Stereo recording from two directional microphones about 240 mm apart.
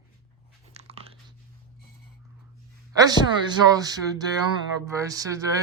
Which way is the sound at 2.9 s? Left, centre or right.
Centre.